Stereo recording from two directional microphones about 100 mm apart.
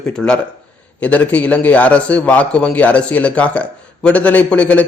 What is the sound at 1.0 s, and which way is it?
A man's voice, 15° left (ahead or behind).